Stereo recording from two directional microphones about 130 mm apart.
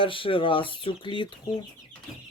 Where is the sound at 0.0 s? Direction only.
40° left (ahead or behind).